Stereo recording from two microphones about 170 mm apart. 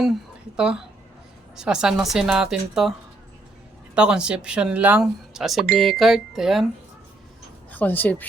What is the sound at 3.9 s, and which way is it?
Speech, 5° right (ahead or behind).